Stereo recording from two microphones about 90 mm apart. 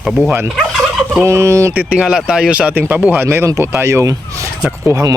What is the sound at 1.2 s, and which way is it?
Speech, 35° right (ahead or behind).